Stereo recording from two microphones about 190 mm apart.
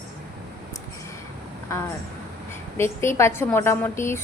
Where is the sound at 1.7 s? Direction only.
15° left (ahead or behind).